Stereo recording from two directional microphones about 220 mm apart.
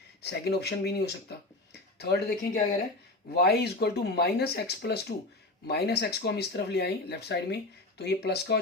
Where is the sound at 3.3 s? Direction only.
45° left (ahead or behind).